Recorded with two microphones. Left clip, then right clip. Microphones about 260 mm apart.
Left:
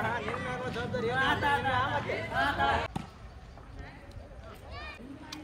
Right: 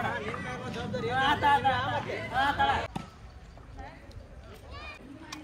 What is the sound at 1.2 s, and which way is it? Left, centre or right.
Speech, right.